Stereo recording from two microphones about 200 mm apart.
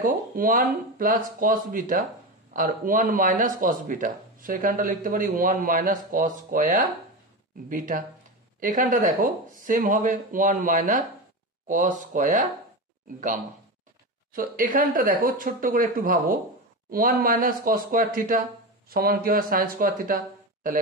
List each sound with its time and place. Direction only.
0.0 s speech: 45° right (ahead or behind)
14.3 s speech: 45° right (ahead or behind)